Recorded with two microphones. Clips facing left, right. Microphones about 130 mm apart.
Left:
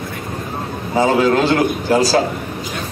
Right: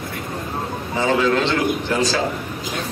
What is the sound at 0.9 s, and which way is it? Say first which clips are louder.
A man's voice: left 4 dB; 40° left (ahead or behind).